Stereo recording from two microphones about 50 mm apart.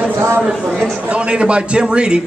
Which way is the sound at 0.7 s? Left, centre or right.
Centre.